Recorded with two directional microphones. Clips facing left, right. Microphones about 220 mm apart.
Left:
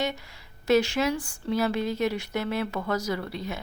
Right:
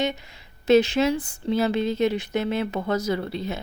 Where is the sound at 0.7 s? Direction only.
20° right (ahead or behind).